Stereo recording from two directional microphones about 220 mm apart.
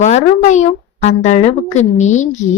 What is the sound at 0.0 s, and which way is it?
Speech, 35° left (ahead or behind).